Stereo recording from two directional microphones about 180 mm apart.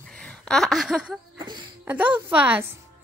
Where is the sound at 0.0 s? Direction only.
5° left (ahead or behind).